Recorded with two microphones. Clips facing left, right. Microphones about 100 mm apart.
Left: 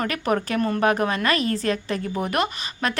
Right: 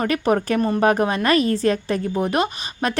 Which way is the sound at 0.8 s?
35° right (ahead or behind).